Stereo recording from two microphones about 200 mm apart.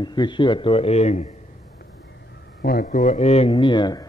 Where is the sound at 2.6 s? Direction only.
50° left (ahead or behind); by 4.1 s 20° left (ahead or behind).